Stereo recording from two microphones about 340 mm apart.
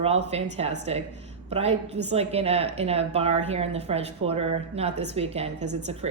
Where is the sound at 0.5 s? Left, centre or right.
Centre.